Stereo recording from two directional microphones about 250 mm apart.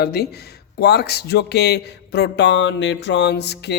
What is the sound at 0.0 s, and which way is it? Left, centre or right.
Speech, left.